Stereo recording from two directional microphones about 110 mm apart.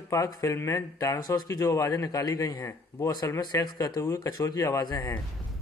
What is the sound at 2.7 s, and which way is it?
Speech, 25° left (ahead or behind).